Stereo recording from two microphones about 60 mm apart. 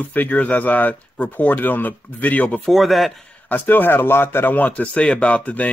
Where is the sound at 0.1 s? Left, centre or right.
Left.